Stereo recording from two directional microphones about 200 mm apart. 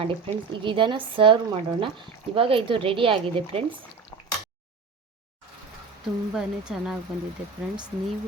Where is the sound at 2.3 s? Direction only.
25° right (ahead or behind).